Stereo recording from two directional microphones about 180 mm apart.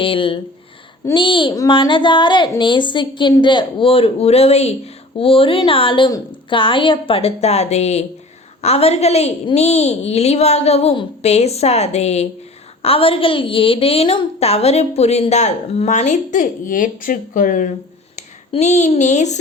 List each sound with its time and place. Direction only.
0.0 s a woman's voice: 30° left (ahead or behind)